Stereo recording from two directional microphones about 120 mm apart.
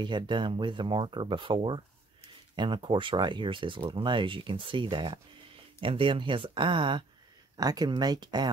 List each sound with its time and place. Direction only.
0.0 s speech: 40° right (ahead or behind)
7.5 s speech: 30° right (ahead or behind)